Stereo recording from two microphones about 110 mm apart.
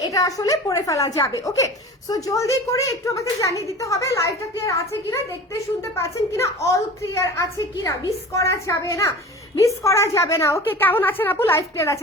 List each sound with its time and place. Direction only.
0.0 s speech: 30° left (ahead or behind)